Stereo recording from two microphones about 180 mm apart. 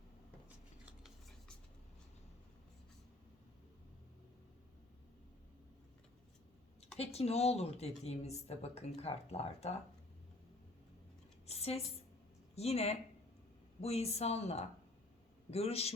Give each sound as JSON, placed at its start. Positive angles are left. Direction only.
{"t": 0.4, "sound": "scissors", "side_deg": -5}
{"t": 7.0, "sound": "speech", "side_deg": 35}
{"t": 11.4, "sound": "a sound", "side_deg": 35}
{"t": 12.5, "sound": "speech", "side_deg": 35}